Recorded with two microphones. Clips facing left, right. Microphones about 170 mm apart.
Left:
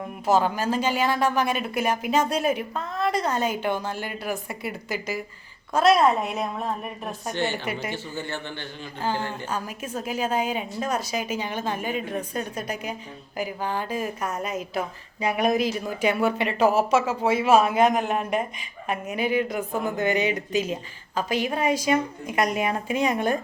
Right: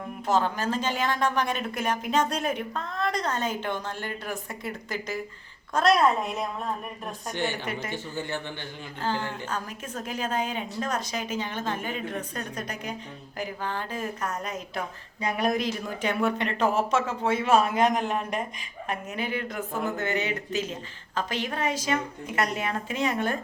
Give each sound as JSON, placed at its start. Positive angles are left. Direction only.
{"t": 0.3, "sound": "a woman's voice", "side_deg": 10}
{"t": 7.9, "sound": "speech", "side_deg": -15}
{"t": 9.0, "sound": "a woman's voice", "side_deg": 15}